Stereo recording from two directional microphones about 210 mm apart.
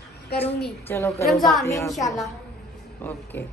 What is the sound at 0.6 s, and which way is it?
Speech, 10° left (ahead or behind).